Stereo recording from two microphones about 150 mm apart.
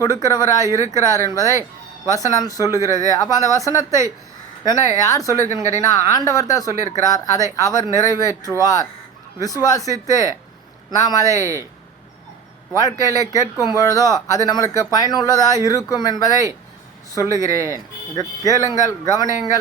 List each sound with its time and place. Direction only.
0.0 s speech: 20° left (ahead or behind)
12.8 s speech: 25° left (ahead or behind)
17.3 s speech: 20° right (ahead or behind)
18.1 s speech: 25° left (ahead or behind)